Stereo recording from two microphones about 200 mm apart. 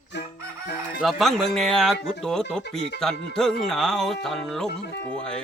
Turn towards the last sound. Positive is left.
turn(degrees=5)  # may be behind; listen again after turning